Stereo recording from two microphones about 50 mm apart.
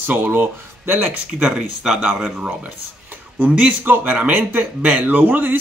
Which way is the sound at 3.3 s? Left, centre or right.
Right.